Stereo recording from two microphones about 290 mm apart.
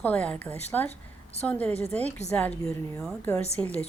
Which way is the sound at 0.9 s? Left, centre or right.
Left.